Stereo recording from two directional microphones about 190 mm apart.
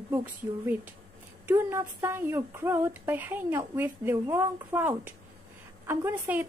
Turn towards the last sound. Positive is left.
turn(degrees=-10)  # may be behind; listen again after turning